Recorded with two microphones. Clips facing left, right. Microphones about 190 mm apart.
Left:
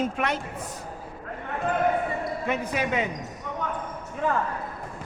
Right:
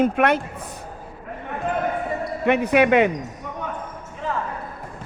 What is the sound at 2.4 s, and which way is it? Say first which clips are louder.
Speech: right 12 dB; 70° right (ahead or behind).